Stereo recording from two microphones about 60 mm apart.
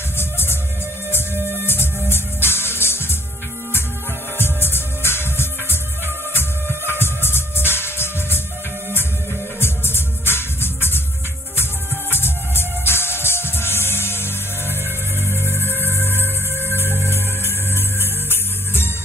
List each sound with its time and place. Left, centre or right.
0.2 s music: left
1.7 s music: left
4.4 s music: left
9.6 s music: left
12.1 s music: left